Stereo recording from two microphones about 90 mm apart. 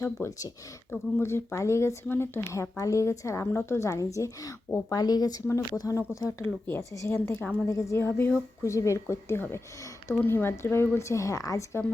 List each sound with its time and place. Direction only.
0.0 s speech: 35° left (ahead or behind)
0.9 s speech: 25° left (ahead or behind); by 6.0 s 45° left (ahead or behind)
6.4 s a woman's voice: 25° left (ahead or behind)